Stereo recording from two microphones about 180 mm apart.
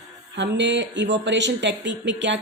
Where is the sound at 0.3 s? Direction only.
80° right.